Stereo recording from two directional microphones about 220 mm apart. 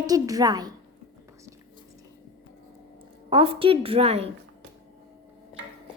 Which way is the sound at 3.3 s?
25° right (ahead or behind).